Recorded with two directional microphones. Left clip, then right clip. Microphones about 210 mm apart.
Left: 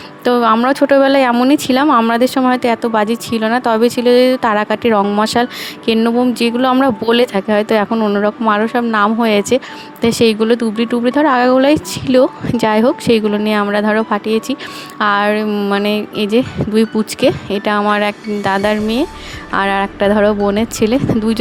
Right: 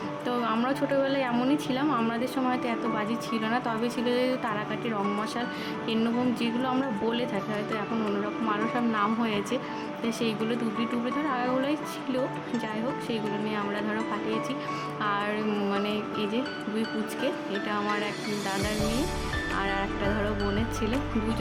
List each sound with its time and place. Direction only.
0.3 s speech: 45° left (ahead or behind)